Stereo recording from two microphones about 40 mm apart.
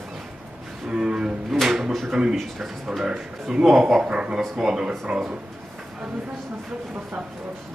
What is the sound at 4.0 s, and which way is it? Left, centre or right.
Speech, right.